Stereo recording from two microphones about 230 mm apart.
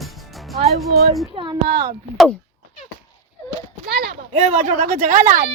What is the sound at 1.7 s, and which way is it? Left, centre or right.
Speech, right.